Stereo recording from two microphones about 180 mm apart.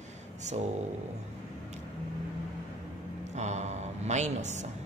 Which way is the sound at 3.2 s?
40° right (ahead or behind).